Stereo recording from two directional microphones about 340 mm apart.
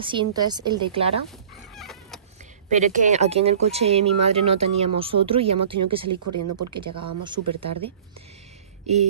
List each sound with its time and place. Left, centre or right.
0.0 s speech: centre
1.8 s cat: centre
2.7 s speech: right
6.2 s speech: right
7.2 s speech: centre